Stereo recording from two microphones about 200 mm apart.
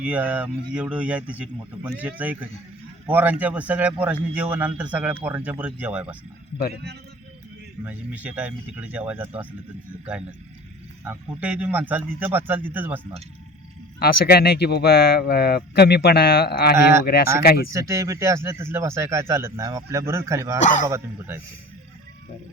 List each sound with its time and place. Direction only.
0.0 s speech: 5° right (ahead or behind)
7.9 s speech: 10° right (ahead or behind)
11.0 s speech: 5° right (ahead or behind)
14.0 s speech: 50° left (ahead or behind)
17.7 s speech: 15° right (ahead or behind)